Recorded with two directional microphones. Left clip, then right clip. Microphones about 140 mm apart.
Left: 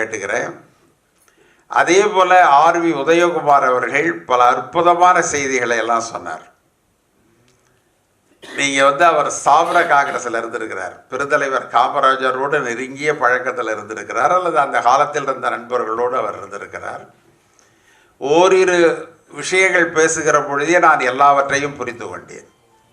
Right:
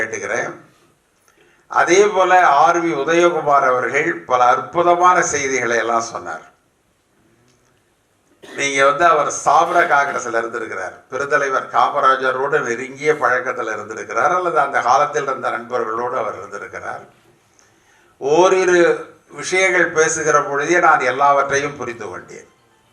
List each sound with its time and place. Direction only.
0.0 s a man's voice: 25° left (ahead or behind)
1.6 s a man's voice: 25° left (ahead or behind)
8.5 s a man's voice: 25° left (ahead or behind)
18.2 s a man's voice: 25° left (ahead or behind)